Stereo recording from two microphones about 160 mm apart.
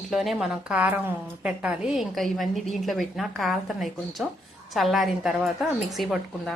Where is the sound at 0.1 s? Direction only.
Centre (ahead or behind).